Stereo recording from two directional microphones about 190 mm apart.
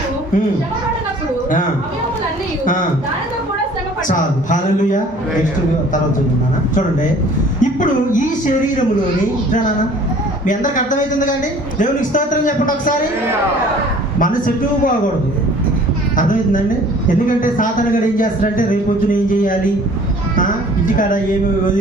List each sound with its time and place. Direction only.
4.1 s a man's voice: 40° left (ahead or behind)
7.6 s speech: 40° left (ahead or behind)
10.4 s a man's voice: 40° left (ahead or behind)
14.2 s a man's voice: 45° left (ahead or behind)
16.1 s a man's voice: 45° left (ahead or behind)
20.9 s a man's voice: 45° left (ahead or behind)